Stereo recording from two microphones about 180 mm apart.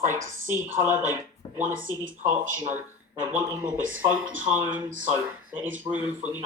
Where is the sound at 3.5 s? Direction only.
10° right (ahead or behind).